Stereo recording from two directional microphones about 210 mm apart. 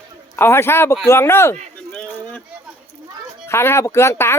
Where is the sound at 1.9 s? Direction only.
5° left (ahead or behind).